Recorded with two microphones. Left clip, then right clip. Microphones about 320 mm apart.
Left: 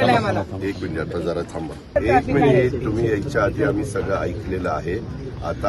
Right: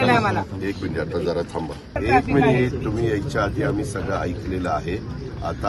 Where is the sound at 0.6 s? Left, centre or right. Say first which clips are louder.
Even; right.